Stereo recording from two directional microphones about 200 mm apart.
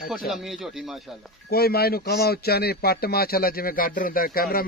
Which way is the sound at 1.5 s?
50° left (ahead or behind).